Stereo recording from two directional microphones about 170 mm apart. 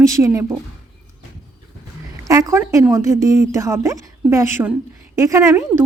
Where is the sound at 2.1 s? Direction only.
20° right (ahead or behind).